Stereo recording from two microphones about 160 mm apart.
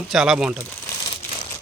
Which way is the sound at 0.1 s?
5° right (ahead or behind).